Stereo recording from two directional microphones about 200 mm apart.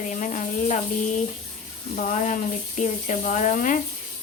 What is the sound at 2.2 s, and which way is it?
Speech, 40° left (ahead or behind).